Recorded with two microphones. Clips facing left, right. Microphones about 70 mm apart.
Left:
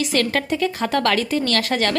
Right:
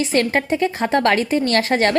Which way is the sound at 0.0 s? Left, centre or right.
Right.